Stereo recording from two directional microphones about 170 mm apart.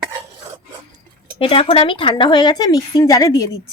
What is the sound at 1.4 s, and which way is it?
A woman's voice, 30° left (ahead or behind).